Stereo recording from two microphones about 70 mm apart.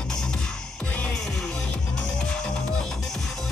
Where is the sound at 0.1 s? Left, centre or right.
Centre.